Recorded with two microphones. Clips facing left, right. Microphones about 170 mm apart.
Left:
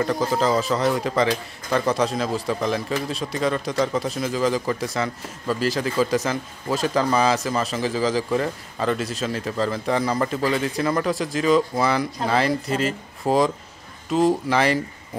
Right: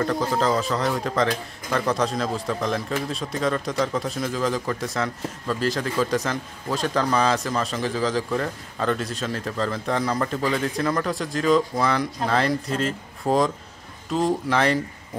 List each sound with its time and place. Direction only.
0.0 s speech: 5° left (ahead or behind)